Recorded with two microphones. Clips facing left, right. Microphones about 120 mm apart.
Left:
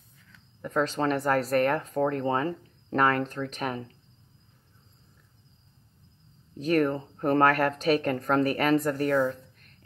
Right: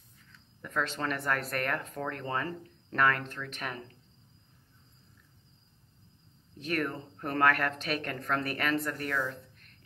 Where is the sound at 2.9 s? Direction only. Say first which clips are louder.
Left 4 dB; 35° left (ahead or behind).